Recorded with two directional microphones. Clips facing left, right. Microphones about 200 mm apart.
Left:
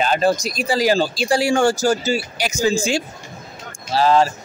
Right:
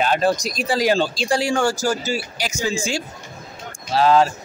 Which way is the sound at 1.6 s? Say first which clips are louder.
Left 4 dB; 25° left (ahead or behind).